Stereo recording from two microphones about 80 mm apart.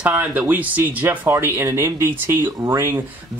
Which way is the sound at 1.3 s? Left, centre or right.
Right.